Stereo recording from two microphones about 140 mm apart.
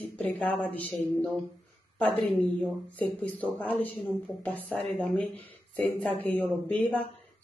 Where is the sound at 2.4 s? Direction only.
10° left (ahead or behind).